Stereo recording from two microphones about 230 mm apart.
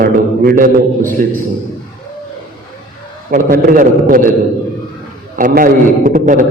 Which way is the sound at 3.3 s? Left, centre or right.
Right.